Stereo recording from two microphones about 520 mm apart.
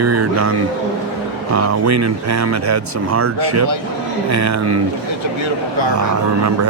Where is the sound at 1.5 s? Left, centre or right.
Right.